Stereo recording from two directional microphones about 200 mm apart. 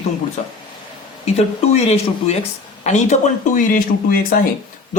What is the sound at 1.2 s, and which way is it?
A man's voice, 30° left (ahead or behind).